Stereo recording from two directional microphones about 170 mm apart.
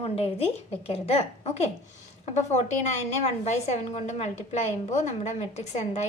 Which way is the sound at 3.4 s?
40° left (ahead or behind).